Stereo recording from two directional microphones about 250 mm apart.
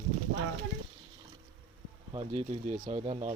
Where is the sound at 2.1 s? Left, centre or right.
Right.